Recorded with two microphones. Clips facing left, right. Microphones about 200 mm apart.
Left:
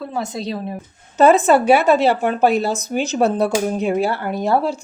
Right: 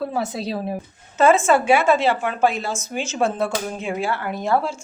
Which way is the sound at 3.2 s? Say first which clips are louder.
Left 4 dB; 40° left (ahead or behind).